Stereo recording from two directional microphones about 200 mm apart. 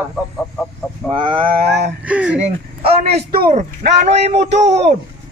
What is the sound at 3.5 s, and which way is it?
Speech, 35° right (ahead or behind).